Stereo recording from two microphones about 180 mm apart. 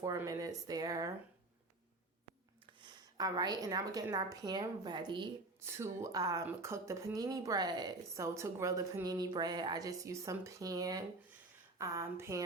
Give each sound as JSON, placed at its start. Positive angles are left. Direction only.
{"t": 0.0, "sound": "speech", "side_deg": -20}
{"t": 2.8, "sound": "speech", "side_deg": -20}
{"t": 5.5, "sound": "speech", "side_deg": -15}